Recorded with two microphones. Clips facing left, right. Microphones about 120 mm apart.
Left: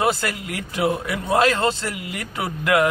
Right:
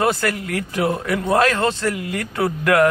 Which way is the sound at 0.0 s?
25° left (ahead or behind).